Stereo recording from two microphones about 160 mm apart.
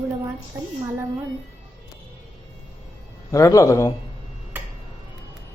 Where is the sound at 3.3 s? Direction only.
20° left (ahead or behind).